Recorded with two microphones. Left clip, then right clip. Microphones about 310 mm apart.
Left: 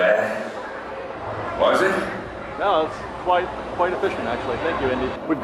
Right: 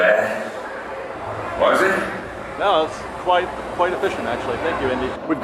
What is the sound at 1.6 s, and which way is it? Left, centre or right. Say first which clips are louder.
A man's voice: right 2 dB; centre.